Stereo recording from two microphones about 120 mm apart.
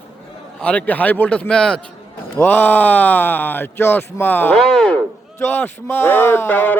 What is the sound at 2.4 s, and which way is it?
Speech, 15° left (ahead or behind).